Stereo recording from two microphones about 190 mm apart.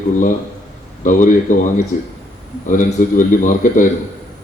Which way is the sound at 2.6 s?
45° left (ahead or behind).